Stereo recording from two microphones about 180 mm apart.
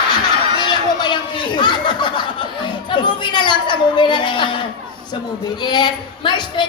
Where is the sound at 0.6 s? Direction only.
25° left (ahead or behind).